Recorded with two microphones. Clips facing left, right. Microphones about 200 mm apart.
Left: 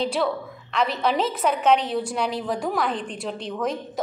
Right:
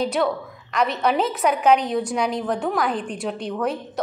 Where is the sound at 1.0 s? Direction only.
5° right (ahead or behind).